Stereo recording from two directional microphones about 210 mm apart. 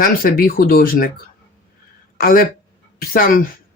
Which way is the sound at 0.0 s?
45° left (ahead or behind).